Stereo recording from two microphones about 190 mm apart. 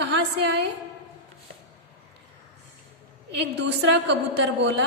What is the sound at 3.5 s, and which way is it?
A woman's voice, 65° right (ahead or behind).